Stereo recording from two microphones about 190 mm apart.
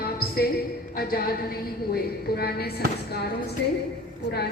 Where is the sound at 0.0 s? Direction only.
55° left (ahead or behind).